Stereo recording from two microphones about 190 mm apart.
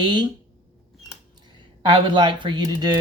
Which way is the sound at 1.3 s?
25° right (ahead or behind).